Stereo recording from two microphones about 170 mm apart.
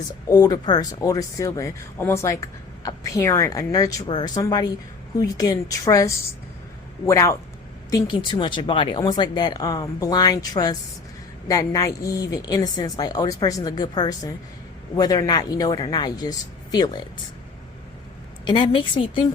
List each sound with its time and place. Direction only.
0.3 s speech: 20° left (ahead or behind)
18.4 s speech: 30° left (ahead or behind)